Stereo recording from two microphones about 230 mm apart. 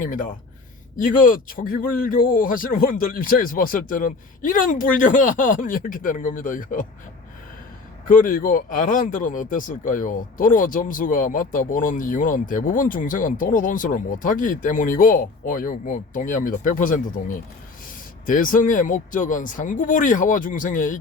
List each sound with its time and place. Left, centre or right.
0.0 s speech: left
8.0 s speech: left